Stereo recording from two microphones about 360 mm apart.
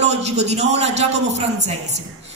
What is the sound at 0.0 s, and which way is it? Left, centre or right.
A woman's voice, centre.